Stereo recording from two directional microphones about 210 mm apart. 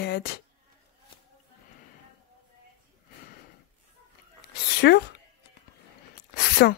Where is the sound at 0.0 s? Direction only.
50° left (ahead or behind).